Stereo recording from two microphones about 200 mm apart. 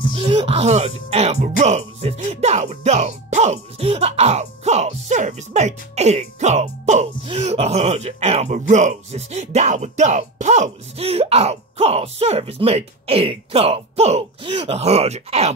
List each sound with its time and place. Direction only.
0.1 s speech: 30° right (ahead or behind)